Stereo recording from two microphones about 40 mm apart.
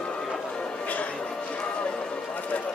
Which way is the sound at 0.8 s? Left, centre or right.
Left.